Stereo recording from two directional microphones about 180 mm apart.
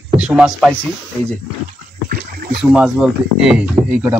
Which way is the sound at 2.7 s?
5° right (ahead or behind).